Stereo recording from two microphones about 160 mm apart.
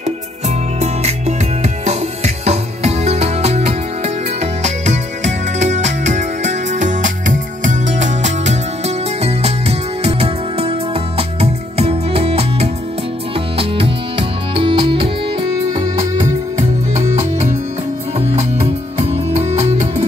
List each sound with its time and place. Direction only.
0.7 s music: 45° right (ahead or behind)
15.7 s music: 20° right (ahead or behind)
16.5 s music: 45° right (ahead or behind)